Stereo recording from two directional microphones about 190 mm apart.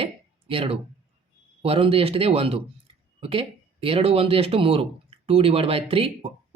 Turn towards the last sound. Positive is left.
turn(degrees=-30)  # may be behind; listen again after turning